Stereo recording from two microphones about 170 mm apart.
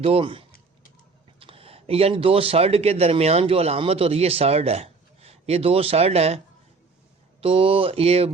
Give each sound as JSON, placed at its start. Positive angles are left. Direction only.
{"t": 0.0, "sound": "speech", "side_deg": -35}
{"t": 7.4, "sound": "speech", "side_deg": -35}